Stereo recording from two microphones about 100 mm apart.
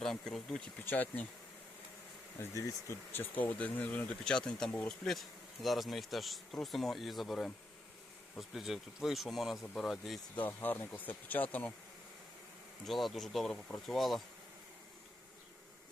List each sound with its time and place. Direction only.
0.0 s speech: 5° left (ahead or behind)
0.9 s speech: 15° left (ahead or behind)
2.4 s speech: 30° left (ahead or behind); by 10.2 s centre (ahead or behind)
10.3 s speech: 15° left (ahead or behind)
12.8 s speech: centre (ahead or behind)